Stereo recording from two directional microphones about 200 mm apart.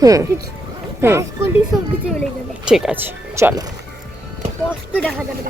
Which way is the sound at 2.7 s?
5° right (ahead or behind).